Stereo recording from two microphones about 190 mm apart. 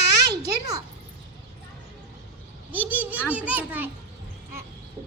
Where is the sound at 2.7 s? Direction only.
10° right (ahead or behind).